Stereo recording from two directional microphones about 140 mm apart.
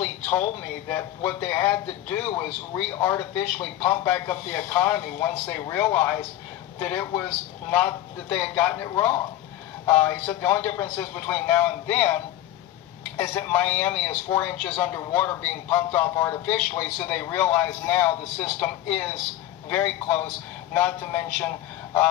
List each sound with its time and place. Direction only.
0.0 s speech: 10° left (ahead or behind)
8.8 s a man's voice: 20° left (ahead or behind)
13.2 s speech: 15° left (ahead or behind)